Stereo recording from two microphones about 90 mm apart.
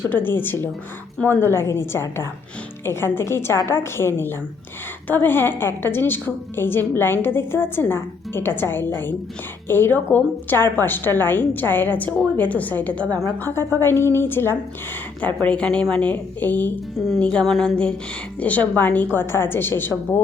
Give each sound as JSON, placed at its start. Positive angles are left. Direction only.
{"t": 0.1, "sound": "a woman's voice", "side_deg": 20}
{"t": 17.4, "sound": "a sound", "side_deg": 0}
{"t": 18.3, "sound": "a woman's voice", "side_deg": 15}